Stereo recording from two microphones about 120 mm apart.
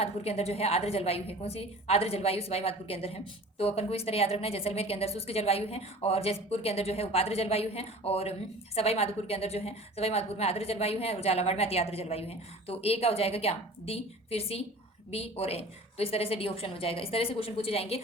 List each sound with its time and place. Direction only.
0.0 s a woman's voice: 55° left (ahead or behind)